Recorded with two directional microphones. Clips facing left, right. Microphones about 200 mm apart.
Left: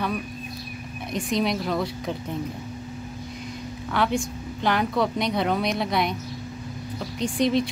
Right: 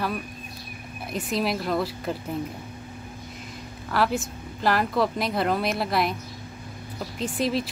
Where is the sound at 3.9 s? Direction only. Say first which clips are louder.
Even; 5° right (ahead or behind).